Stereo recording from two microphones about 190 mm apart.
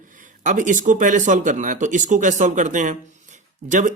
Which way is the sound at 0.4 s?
40° right (ahead or behind).